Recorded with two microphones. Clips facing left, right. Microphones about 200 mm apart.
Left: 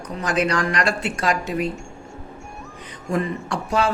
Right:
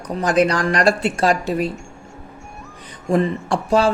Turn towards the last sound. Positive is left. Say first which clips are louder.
# right 5 dB
turn(degrees=-30)  # may be behind; listen again after turning